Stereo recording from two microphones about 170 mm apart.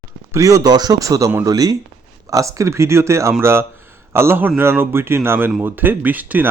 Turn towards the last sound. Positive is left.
turn(degrees=-10)  # may be behind; listen again after turning